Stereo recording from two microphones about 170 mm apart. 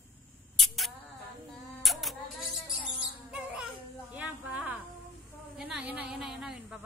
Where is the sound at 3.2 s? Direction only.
5° right (ahead or behind).